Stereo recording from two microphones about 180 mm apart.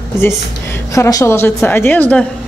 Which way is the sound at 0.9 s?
15° left (ahead or behind).